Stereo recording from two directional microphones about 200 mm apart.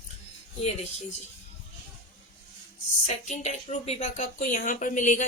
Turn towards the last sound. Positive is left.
turn(degrees=40)  # may be behind; listen again after turning